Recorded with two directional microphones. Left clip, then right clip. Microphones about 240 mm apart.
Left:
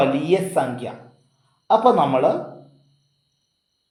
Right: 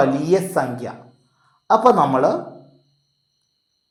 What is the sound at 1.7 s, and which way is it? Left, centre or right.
Speech, right.